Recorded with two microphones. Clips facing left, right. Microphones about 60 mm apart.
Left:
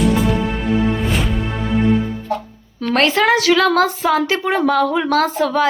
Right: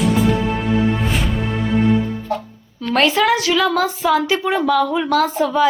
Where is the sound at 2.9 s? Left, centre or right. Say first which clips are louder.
Even; left.